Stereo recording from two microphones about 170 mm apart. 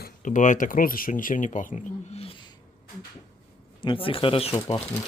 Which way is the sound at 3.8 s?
30° left (ahead or behind).